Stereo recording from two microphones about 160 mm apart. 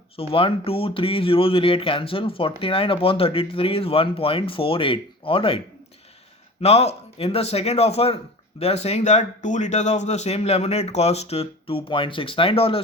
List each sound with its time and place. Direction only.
0.2 s speech: 35° left (ahead or behind)